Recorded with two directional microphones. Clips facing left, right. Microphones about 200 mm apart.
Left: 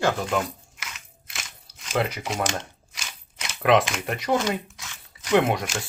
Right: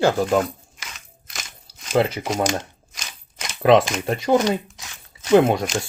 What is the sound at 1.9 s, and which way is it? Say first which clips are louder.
Speech: right 6 dB; 35° right (ahead or behind).